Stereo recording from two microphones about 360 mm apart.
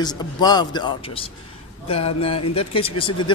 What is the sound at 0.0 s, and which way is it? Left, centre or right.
A man's voice, centre.